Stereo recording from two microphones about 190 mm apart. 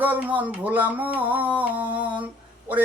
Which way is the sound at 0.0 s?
10° right (ahead or behind).